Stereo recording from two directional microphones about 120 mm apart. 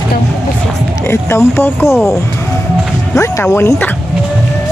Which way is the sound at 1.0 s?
20° left (ahead or behind).